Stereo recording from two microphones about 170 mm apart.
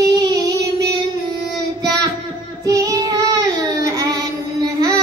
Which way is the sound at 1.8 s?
20° right (ahead or behind).